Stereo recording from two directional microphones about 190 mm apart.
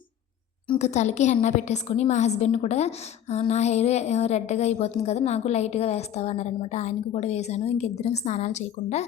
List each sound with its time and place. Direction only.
0.7 s a woman's voice: 35° left (ahead or behind)